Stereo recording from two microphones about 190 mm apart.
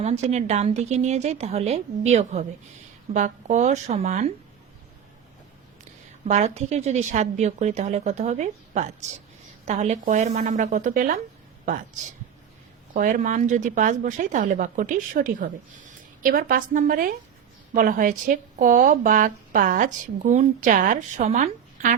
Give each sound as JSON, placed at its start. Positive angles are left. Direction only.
{"t": 0.0, "sound": "a woman's voice", "side_deg": -35}
{"t": 6.2, "sound": "a woman's voice", "side_deg": -35}
{"t": 12.9, "sound": "a woman's voice", "side_deg": -45}